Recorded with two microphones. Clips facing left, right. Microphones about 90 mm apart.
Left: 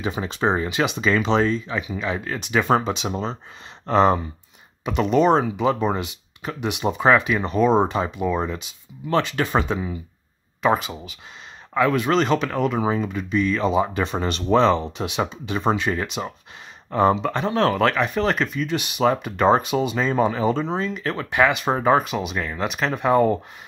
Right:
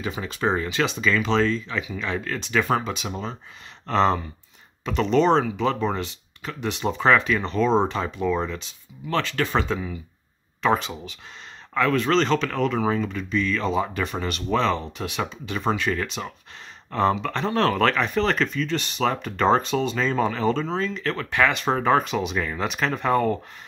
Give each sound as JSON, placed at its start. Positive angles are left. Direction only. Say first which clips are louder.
{"t": 0.0, "sound": "speech", "louder": "left 3 dB", "side_deg": 25}
{"t": 2.0, "sound": "speech", "louder": "left 2 dB", "side_deg": 10}
{"t": 3.8, "sound": "speech", "louder": "left 3 dB", "side_deg": 15}
{"t": 10.6, "sound": "speech", "louder": "left 2 dB", "side_deg": 10}
{"t": 17.4, "sound": "speech", "louder": "right 1 dB", "side_deg": 5}